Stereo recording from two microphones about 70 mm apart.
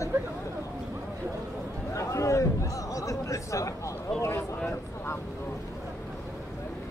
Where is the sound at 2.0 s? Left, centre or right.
Left.